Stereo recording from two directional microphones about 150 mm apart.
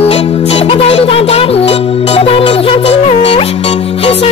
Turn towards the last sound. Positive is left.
turn(degrees=40)  # may be behind; listen again after turning